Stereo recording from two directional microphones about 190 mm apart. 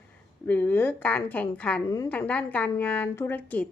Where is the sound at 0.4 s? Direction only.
10° left (ahead or behind).